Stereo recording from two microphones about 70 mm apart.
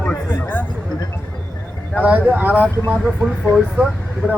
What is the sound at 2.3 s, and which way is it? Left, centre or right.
Speech, right.